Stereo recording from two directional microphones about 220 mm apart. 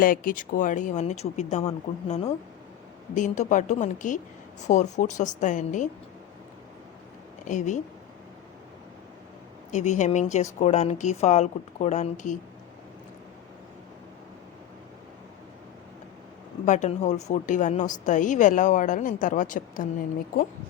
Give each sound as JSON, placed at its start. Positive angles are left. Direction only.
{"t": 0.0, "sound": "a woman's voice", "side_deg": 40}
{"t": 7.4, "sound": "a woman's voice", "side_deg": 35}
{"t": 9.7, "sound": "a woman's voice", "side_deg": 35}
{"t": 16.6, "sound": "a woman's voice", "side_deg": 35}